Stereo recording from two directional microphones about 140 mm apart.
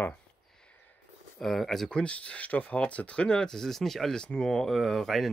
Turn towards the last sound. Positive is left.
turn(degrees=0)  # may be behind; listen again after turning